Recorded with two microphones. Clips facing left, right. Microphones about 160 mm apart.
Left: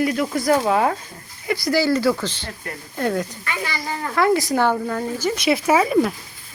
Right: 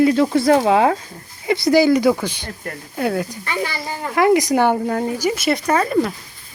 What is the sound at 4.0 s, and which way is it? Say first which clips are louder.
Speech: right 4 dB; 15° right (ahead or behind).